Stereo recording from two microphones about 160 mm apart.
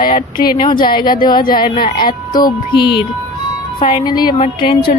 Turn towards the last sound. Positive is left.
turn(degrees=30)  # may be behind; listen again after turning